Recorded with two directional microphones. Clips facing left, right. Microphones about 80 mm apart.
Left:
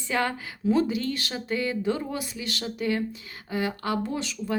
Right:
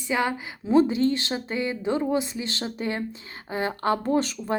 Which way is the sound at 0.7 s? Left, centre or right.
Right.